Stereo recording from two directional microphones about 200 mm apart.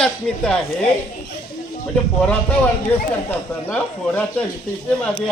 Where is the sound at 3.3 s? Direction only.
5° left (ahead or behind).